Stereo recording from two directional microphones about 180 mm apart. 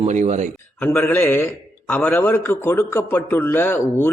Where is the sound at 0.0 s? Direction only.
40° right (ahead or behind).